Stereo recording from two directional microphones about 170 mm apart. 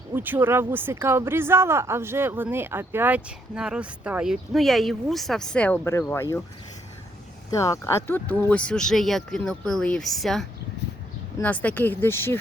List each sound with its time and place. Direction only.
0.1 s speech: 10° right (ahead or behind); by 6.4 s 15° left (ahead or behind)
7.5 s speech: 20° left (ahead or behind)